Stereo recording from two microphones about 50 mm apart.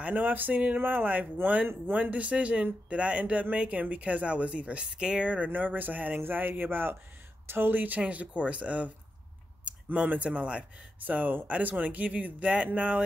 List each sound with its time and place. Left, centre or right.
0.0 s speech: right; by 5.3 s centre
5.3 s speech: right
11.0 s speech: right